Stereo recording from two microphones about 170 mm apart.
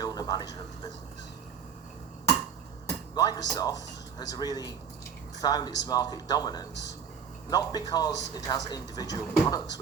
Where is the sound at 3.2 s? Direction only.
20° left (ahead or behind).